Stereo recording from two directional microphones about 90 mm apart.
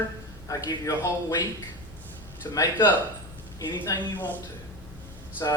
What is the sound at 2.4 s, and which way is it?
Speech, 40° left (ahead or behind).